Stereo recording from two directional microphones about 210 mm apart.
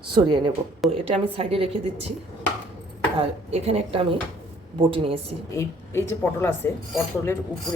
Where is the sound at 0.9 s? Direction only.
25° right (ahead or behind).